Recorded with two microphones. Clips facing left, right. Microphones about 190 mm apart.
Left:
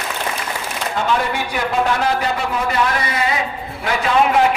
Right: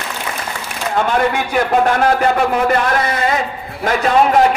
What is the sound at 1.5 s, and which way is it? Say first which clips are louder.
A man's voice: right 4 dB; 55° right (ahead or behind).